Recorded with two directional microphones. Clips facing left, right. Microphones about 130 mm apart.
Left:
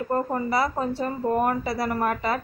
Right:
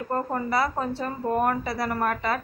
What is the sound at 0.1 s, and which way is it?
A woman's voice, 15° left (ahead or behind).